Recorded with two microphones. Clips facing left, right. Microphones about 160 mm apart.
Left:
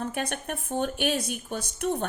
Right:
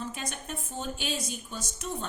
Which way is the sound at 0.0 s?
60° left (ahead or behind).